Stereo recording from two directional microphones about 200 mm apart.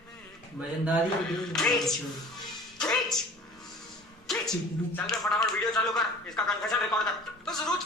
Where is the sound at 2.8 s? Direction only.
5° left (ahead or behind).